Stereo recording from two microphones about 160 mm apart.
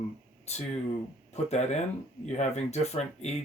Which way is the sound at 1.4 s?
45° left (ahead or behind).